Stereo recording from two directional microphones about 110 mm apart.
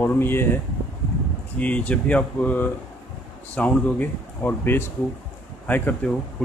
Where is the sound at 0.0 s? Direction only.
20° left (ahead or behind).